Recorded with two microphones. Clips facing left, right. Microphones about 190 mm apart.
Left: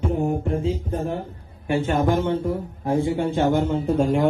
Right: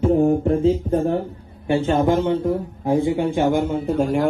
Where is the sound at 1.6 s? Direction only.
25° right (ahead or behind); by 4.2 s 5° right (ahead or behind).